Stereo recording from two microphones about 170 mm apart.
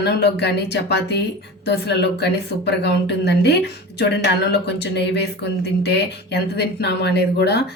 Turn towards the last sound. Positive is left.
turn(degrees=80)